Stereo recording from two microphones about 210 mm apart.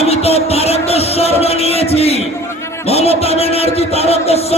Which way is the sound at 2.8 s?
30° left (ahead or behind).